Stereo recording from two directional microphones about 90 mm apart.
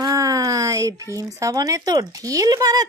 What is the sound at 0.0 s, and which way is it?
Speech, 40° right (ahead or behind).